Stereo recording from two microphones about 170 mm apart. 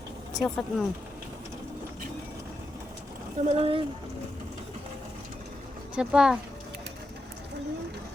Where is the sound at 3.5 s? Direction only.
35° right (ahead or behind).